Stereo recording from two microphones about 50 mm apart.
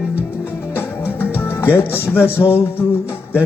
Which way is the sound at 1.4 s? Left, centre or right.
Left.